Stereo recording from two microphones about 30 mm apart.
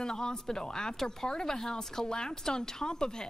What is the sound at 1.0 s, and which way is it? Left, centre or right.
Speech, centre.